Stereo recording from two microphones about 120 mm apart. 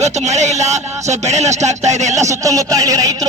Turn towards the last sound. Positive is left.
turn(degrees=-30)  # may be behind; listen again after turning